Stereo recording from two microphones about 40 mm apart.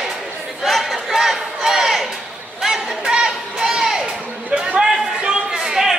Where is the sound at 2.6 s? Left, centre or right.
Centre.